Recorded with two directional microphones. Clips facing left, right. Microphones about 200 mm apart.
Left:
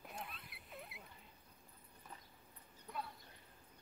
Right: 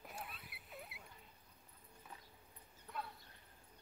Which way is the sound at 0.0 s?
Centre (ahead or behind).